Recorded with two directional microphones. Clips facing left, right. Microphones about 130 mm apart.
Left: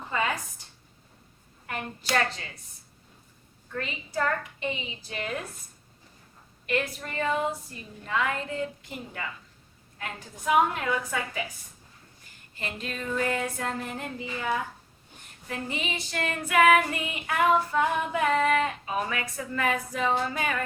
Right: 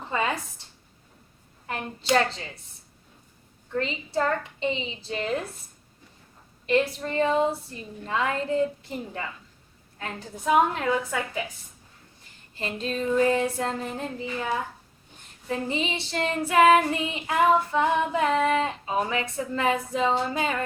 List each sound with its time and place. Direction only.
0.1 s a sound: 30° right (ahead or behind)
1.6 s speech: 25° right (ahead or behind)
3.7 s child singing: 25° right (ahead or behind)
6.7 s child singing: 30° right (ahead or behind)
12.5 s child singing: 30° right (ahead or behind)
15.4 s child singing: 30° right (ahead or behind)